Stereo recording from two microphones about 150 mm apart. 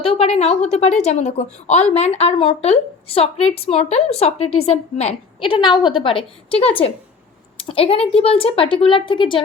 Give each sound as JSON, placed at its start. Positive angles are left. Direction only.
{"t": 0.0, "sound": "a woman's voice", "side_deg": 40}